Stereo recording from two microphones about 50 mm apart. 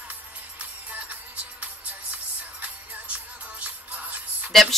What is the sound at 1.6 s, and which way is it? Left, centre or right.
Music, right.